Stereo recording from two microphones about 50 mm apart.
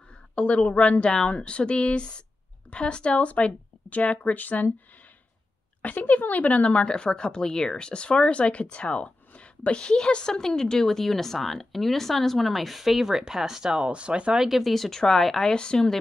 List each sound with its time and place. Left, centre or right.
0.4 s speech: left
5.8 s a woman's voice: left; by 14.3 s right
14.3 s a woman's voice: centre
15.6 s speech: centre